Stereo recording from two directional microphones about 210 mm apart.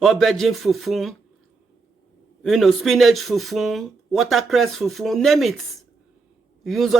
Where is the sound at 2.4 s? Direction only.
Centre (ahead or behind).